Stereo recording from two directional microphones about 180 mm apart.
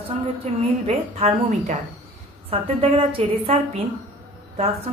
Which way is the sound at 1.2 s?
35° right (ahead or behind).